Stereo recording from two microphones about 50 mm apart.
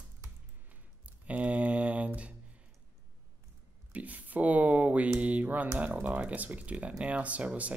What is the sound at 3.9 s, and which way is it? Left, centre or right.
Speech, right.